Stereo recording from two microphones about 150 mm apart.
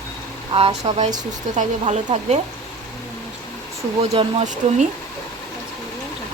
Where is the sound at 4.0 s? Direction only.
50° right (ahead or behind).